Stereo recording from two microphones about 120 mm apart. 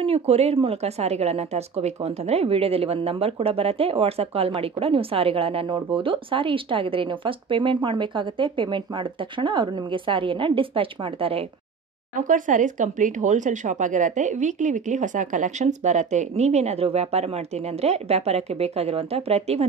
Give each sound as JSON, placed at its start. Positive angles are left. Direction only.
{"t": 0.0, "sound": "speech", "side_deg": -55}
{"t": 12.2, "sound": "speech", "side_deg": -90}